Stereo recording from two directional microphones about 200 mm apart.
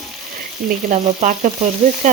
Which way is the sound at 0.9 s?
40° right (ahead or behind).